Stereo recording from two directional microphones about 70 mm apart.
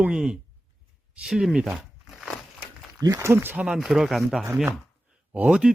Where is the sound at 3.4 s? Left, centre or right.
Centre.